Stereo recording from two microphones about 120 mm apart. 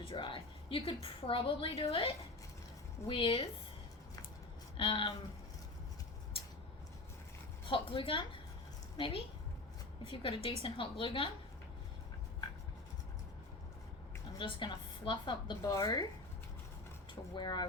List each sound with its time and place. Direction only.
0.0 s a woman's voice: 45° left (ahead or behind)
3.1 s a woman's voice: 45° left (ahead or behind)
4.8 s a woman's voice: 45° left (ahead or behind)
7.7 s a woman's voice: 45° left (ahead or behind)
14.3 s a woman's voice: 40° left (ahead or behind)
15.6 s speech: 25° left (ahead or behind)
17.3 s a woman's voice: 35° left (ahead or behind)